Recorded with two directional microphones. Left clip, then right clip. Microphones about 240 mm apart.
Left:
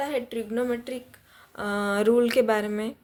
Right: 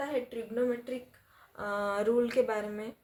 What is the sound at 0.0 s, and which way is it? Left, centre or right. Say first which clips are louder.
Speech: left 5 dB; left.